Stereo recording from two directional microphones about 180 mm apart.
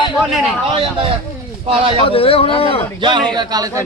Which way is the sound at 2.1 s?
30° left (ahead or behind).